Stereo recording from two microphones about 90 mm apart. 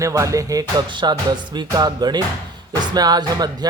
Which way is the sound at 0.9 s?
55° right (ahead or behind).